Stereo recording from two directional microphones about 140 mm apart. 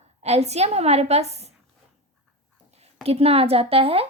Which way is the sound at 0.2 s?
50° right (ahead or behind).